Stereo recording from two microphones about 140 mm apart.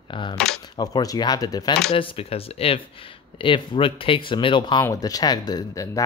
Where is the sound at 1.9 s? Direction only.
40° left (ahead or behind).